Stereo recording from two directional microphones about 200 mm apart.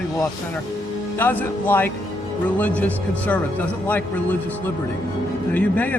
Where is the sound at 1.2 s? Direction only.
10° left (ahead or behind).